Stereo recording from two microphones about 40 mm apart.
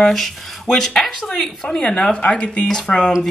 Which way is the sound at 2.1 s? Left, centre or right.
Left.